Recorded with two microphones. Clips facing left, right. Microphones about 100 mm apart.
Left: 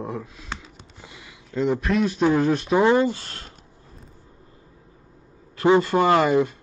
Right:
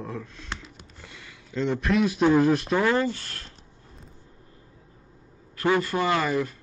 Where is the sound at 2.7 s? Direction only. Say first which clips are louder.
Left 5 dB; 20° left (ahead or behind).